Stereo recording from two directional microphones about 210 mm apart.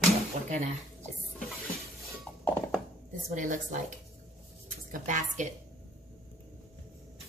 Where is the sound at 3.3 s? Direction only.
35° right (ahead or behind).